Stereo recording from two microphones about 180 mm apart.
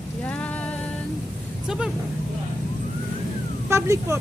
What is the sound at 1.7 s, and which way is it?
Vehicle, 5° right (ahead or behind).